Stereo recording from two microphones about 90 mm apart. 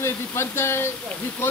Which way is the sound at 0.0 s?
30° left (ahead or behind).